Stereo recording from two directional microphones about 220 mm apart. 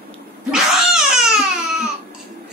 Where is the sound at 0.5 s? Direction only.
Centre (ahead or behind).